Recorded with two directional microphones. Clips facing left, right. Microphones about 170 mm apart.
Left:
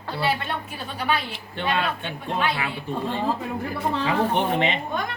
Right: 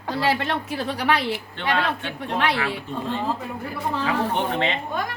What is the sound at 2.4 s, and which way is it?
Speech, 80° right.